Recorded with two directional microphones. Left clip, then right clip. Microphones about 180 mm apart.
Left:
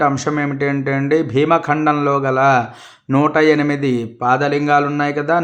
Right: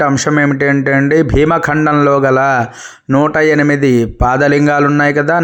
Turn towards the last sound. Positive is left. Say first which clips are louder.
# right 6 dB
turn(degrees=-35)  # may be behind; listen again after turning